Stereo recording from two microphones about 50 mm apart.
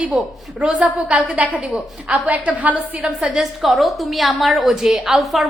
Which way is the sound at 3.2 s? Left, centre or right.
Centre.